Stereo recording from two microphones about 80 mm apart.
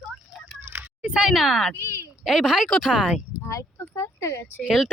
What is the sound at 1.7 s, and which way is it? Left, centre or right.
Speech, left.